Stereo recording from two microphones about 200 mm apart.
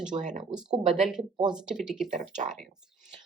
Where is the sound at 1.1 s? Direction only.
5° right (ahead or behind).